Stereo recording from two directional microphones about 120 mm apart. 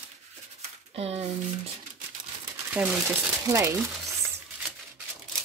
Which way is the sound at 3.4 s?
25° right (ahead or behind).